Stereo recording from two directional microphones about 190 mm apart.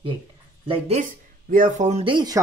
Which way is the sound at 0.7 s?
35° right (ahead or behind).